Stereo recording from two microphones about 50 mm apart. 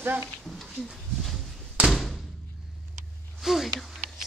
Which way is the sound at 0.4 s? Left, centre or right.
Centre.